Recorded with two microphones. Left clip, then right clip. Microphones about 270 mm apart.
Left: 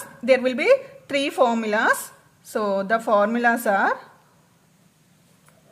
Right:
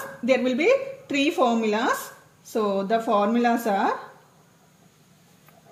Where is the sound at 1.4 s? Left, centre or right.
Left.